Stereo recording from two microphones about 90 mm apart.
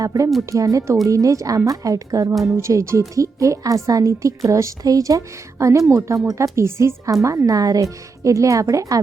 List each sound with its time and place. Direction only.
0.0 s a woman's voice: 40° right (ahead or behind)